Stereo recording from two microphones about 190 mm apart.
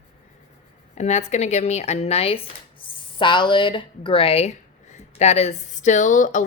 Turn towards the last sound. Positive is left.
turn(degrees=45)  # may be behind; listen again after turning